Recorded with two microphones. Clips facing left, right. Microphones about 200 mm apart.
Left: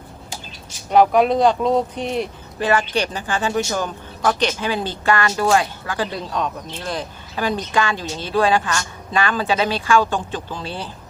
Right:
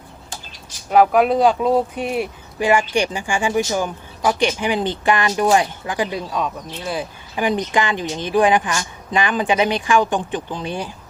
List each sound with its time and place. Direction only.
0.9 s speech: 5° right (ahead or behind)